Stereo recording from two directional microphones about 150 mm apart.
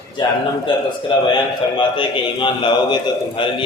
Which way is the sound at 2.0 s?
30° left (ahead or behind).